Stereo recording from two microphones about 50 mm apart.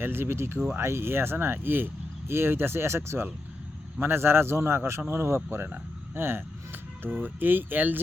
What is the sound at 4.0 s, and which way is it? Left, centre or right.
A man's voice, right.